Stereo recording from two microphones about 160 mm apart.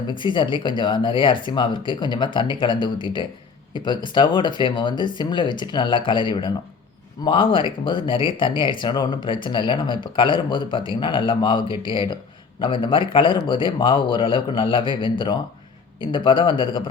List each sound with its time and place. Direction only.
0.1 s a man's voice: 30° left (ahead or behind)